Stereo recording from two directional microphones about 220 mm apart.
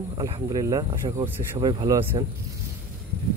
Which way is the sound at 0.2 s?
15° right (ahead or behind).